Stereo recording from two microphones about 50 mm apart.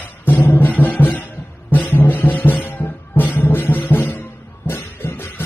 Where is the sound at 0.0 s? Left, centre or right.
Left.